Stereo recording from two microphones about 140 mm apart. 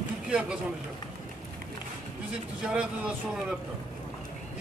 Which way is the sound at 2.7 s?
5° right (ahead or behind).